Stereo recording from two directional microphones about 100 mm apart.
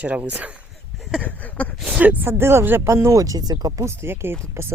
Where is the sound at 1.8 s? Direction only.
15° right (ahead or behind).